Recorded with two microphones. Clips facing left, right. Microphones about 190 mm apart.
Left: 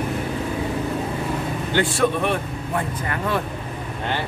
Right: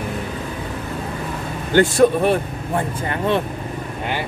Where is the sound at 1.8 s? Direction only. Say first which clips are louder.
Right 7 dB; 40° right (ahead or behind).